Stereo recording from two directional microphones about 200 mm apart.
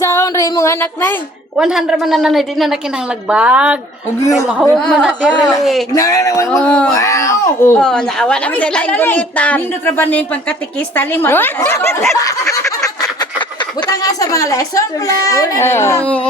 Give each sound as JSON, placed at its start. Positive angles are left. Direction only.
{"t": 0.0, "sound": "a sound", "side_deg": 15}
{"t": 1.5, "sound": "a woman's voice", "side_deg": -5}
{"t": 4.6, "sound": "a woman's voice", "side_deg": 5}
{"t": 5.9, "sound": "speech", "side_deg": 15}
{"t": 7.8, "sound": "speech", "side_deg": 5}
{"t": 12.2, "sound": "a sound", "side_deg": 15}
{"t": 13.8, "sound": "speech", "side_deg": 20}